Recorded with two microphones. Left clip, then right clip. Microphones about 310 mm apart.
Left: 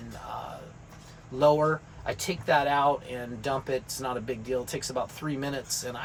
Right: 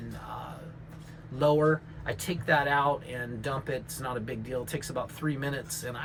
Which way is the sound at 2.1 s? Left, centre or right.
Centre.